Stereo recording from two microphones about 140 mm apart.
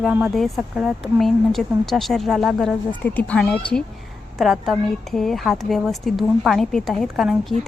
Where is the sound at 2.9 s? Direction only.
10° left (ahead or behind).